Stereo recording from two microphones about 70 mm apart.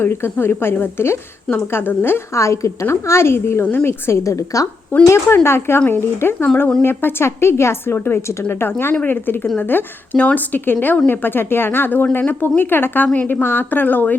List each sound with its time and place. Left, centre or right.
0.0 s a woman's voice: left
2.3 s a woman's voice: left
5.0 s a woman's voice: left